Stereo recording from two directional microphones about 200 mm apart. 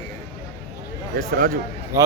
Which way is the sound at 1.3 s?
45° right (ahead or behind).